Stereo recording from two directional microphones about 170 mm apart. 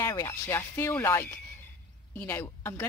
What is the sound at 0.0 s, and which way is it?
A woman's voice, 20° left (ahead or behind).